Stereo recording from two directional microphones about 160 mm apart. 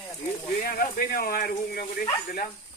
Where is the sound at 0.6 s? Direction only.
65° left (ahead or behind).